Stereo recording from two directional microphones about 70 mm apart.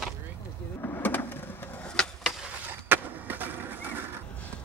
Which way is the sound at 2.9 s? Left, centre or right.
Right.